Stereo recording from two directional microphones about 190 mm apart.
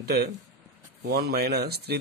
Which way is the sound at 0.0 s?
55° right (ahead or behind).